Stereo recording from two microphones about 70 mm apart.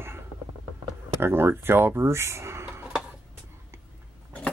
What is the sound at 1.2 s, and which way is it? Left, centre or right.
Speech, right.